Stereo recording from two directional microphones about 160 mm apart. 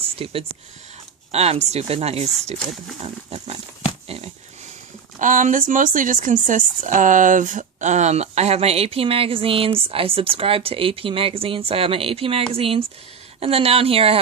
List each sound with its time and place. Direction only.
0.2 s speech: 35° right (ahead or behind)
5.2 s speech: 55° right (ahead or behind); by 14.2 s 35° right (ahead or behind)